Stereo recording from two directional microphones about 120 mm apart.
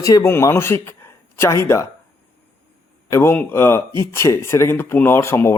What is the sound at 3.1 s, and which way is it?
Speech, 20° left (ahead or behind).